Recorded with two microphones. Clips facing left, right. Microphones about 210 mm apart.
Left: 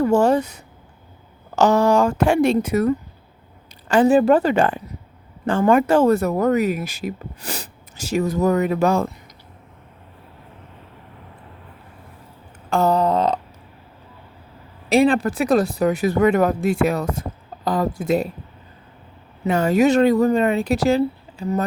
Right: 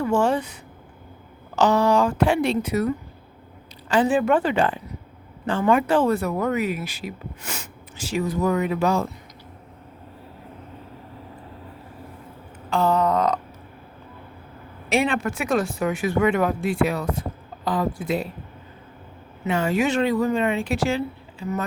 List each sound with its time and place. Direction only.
0.0 s speech: 40° left (ahead or behind)
12.7 s speech: 40° left (ahead or behind)
14.8 s speech: 35° left (ahead or behind)
19.5 s speech: 40° left (ahead or behind)